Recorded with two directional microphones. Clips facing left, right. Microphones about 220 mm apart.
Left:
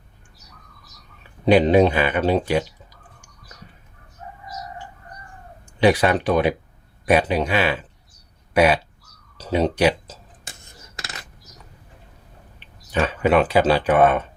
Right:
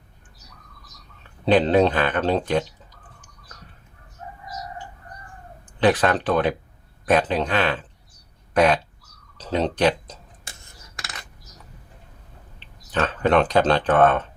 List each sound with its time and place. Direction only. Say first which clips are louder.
1.2 s speech: left 3 dB; 10° left (ahead or behind)
5.8 s speech: left 2 dB; 10° left (ahead or behind)
9.4 s tick-tock: left 2 dB; 10° left (ahead or behind)
12.5 s speech: left 2 dB; 10° left (ahead or behind)